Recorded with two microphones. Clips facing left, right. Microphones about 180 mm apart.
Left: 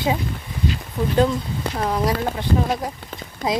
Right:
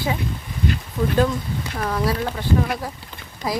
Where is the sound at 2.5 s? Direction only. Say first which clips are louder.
Right 1 dB; 40° left (ahead or behind).